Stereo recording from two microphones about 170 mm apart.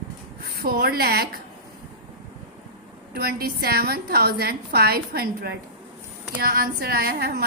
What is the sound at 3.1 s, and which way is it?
A woman's voice, 65° right (ahead or behind).